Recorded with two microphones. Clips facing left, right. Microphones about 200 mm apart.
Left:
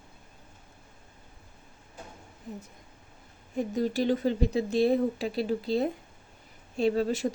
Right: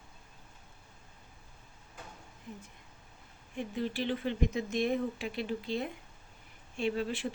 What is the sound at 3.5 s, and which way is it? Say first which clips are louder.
Speech: left 7 dB; 40° left (ahead or behind).